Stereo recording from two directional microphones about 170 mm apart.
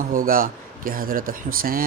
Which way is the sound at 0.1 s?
55° right (ahead or behind).